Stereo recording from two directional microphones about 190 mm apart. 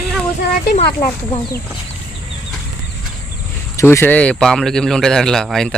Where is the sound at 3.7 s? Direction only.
15° left (ahead or behind).